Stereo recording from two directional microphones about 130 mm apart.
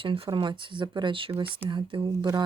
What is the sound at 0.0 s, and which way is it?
Speech, 40° right (ahead or behind).